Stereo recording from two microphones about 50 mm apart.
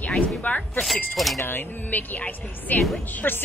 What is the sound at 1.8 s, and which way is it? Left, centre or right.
Speech, left.